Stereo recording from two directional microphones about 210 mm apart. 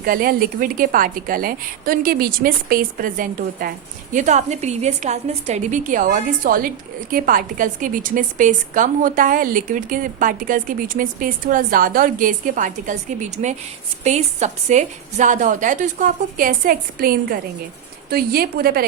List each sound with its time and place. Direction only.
0.0 s a woman's voice: 45° right (ahead or behind)